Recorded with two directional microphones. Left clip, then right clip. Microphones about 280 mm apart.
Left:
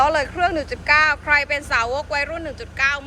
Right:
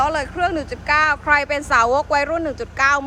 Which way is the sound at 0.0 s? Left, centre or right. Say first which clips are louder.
Left 1 dB; centre.